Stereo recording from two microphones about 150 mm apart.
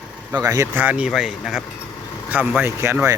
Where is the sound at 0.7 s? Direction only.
10° right (ahead or behind).